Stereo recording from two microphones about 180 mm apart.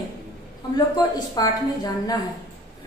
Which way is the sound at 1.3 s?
20° left (ahead or behind).